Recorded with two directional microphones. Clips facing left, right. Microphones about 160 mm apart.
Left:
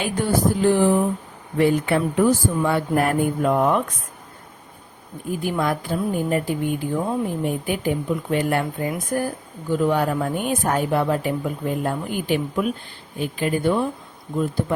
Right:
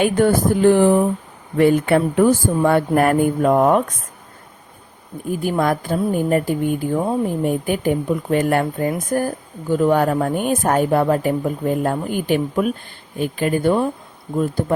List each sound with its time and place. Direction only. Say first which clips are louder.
0.0 s speech: right 5 dB; 55° right (ahead or behind)
5.4 s speech: right 4 dB; 50° right (ahead or behind)